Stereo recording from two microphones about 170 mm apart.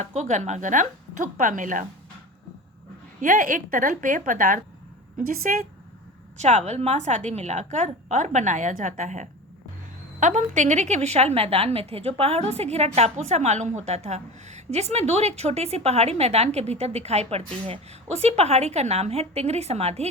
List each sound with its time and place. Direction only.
0.0 s a woman's voice: 45° right (ahead or behind)
3.2 s a woman's voice: 50° right (ahead or behind)
6.4 s a woman's voice: 40° right (ahead or behind)